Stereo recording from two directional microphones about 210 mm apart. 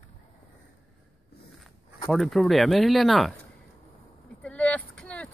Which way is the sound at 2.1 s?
Centre (ahead or behind).